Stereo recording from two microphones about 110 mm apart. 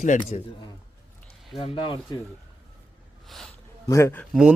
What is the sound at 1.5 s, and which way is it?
Speech, 55° left (ahead or behind).